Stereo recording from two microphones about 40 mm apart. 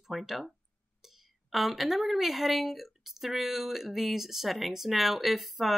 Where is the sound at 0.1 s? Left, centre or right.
Centre.